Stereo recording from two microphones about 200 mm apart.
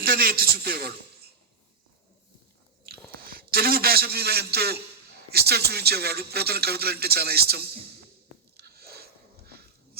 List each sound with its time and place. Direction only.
0.0 s a man's voice: 45° right (ahead or behind)
3.2 s a man's voice: 50° right (ahead or behind)
8.5 s a sound: 50° right (ahead or behind)